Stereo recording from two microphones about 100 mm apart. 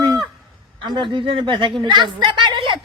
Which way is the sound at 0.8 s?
55° right (ahead or behind).